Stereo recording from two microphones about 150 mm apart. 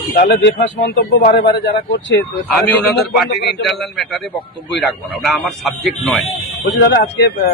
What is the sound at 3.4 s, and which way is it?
Speech, 90° left.